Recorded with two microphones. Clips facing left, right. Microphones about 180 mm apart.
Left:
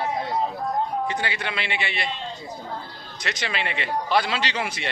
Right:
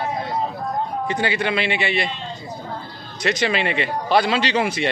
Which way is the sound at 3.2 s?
15° right (ahead or behind).